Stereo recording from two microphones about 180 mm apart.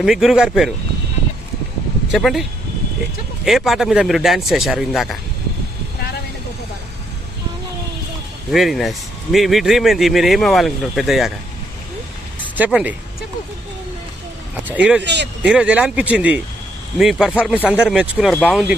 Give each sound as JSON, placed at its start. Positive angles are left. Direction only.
{"t": 0.0, "sound": "speech", "side_deg": 0}
{"t": 2.1, "sound": "speech", "side_deg": 0}
{"t": 8.5, "sound": "speech", "side_deg": 0}
{"t": 12.5, "sound": "a man's voice", "side_deg": -10}
{"t": 14.7, "sound": "a man's voice", "side_deg": -5}
{"t": 15.0, "sound": "speech", "side_deg": -75}
{"t": 15.4, "sound": "a man's voice", "side_deg": -5}